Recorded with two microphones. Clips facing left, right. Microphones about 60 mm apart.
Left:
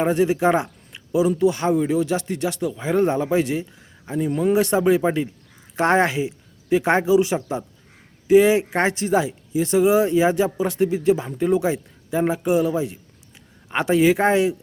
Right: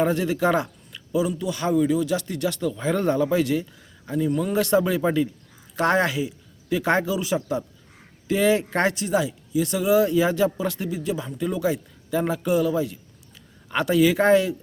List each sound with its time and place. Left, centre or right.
0.0 s speech: left